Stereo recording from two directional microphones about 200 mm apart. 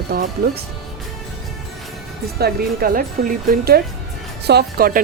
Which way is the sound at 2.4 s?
50° right (ahead or behind).